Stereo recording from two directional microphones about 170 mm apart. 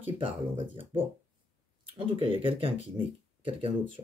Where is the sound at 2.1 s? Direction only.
30° right (ahead or behind).